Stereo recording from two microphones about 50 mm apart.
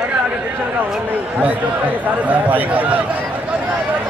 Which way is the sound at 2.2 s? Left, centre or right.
Right.